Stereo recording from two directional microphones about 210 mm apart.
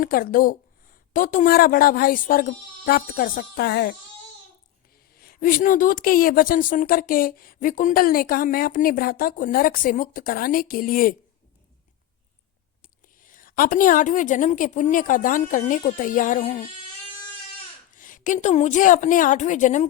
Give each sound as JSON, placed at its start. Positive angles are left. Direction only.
{"t": 0.0, "sound": "a woman's voice", "side_deg": 45}
{"t": 5.1, "sound": "a woman's voice", "side_deg": 45}
{"t": 12.8, "sound": "a woman's voice", "side_deg": 40}
{"t": 17.9, "sound": "a woman's voice", "side_deg": 40}